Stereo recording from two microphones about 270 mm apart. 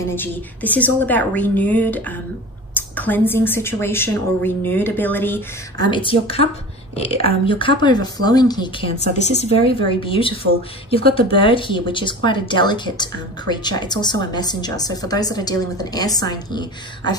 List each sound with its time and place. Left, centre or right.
0.1 s speech: centre
5.9 s speech: centre